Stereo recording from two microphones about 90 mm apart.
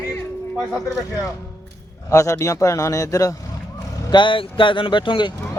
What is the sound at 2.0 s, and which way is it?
A man's voice, 35° left (ahead or behind).